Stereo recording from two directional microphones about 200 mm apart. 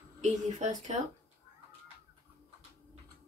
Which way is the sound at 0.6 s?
35° right (ahead or behind).